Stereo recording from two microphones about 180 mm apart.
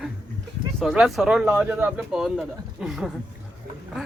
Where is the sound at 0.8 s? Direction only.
Centre (ahead or behind).